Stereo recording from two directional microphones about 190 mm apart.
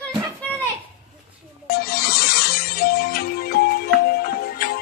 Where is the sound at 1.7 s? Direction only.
55° left (ahead or behind).